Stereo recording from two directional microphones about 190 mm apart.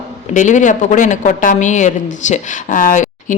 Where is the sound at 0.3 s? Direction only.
40° left (ahead or behind).